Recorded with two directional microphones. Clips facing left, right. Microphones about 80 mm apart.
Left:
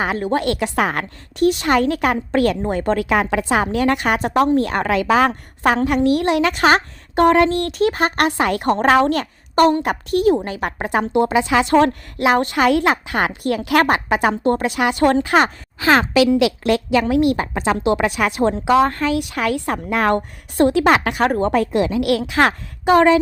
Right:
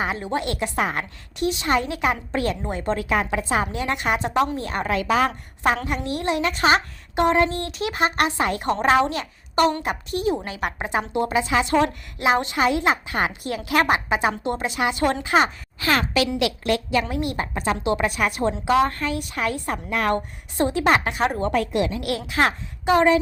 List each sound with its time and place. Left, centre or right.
0.0 s a woman's voice: left
1.4 s a woman's voice: left
1.9 s speech: left
2.3 s a woman's voice: left
5.6 s a woman's voice: left
6.7 s a sound: left
7.3 s a woman's voice: left
7.7 s speech: left
8.7 s a woman's voice: left
10.4 s a woman's voice: left
10.8 s a woman's voice: left
13.8 s a woman's voice: left
16.9 s a woman's voice: left